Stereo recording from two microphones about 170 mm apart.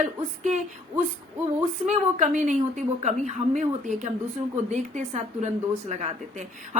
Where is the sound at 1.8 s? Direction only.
45° right (ahead or behind).